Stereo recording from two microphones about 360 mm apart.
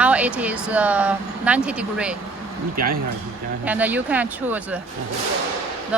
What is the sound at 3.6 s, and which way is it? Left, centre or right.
Speech, centre.